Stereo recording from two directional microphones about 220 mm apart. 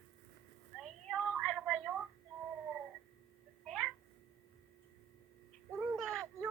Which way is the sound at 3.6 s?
Centre (ahead or behind).